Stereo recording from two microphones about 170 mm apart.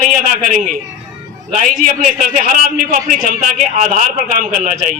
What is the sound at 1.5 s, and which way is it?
A man's voice, 45° right (ahead or behind).